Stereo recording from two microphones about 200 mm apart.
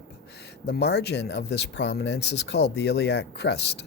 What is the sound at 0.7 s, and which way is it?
Speech, 55° left (ahead or behind).